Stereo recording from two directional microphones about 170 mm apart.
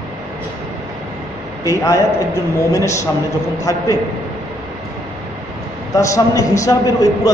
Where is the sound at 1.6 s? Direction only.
20° left (ahead or behind).